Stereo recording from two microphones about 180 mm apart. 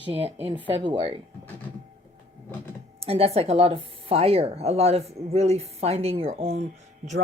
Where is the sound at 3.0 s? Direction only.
35° right (ahead or behind).